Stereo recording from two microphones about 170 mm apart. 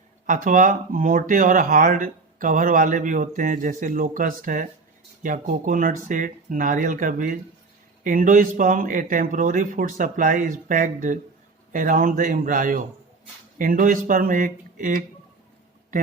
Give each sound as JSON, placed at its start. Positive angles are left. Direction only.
{"t": 0.3, "sound": "speech", "side_deg": -50}